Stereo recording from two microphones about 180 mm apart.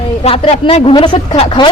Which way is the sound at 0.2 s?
30° left (ahead or behind).